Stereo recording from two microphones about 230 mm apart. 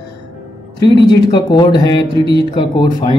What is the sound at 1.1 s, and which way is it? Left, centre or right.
Speech, centre.